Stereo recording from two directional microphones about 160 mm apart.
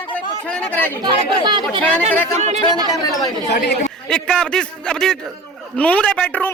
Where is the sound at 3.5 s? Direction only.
90° left.